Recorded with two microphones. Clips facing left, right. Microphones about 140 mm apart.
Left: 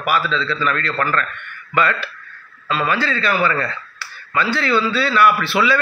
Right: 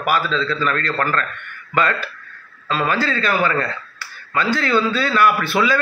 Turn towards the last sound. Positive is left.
turn(degrees=-45)  # may be behind; listen again after turning